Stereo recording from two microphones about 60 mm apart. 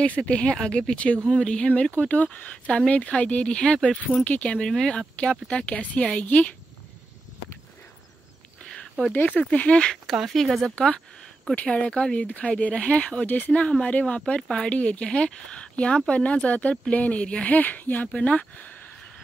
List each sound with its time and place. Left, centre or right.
0.0 s speech: left
9.3 s speech: left
10.3 s speech: centre
11.6 s speech: centre